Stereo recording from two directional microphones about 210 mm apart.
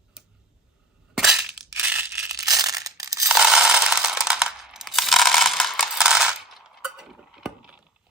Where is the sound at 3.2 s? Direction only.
5° right (ahead or behind).